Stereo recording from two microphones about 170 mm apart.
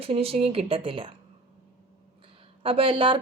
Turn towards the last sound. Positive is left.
turn(degrees=-30)  # may be behind; listen again after turning